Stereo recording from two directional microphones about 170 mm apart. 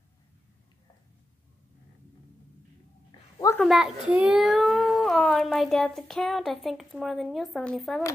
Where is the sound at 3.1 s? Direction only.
20° left (ahead or behind).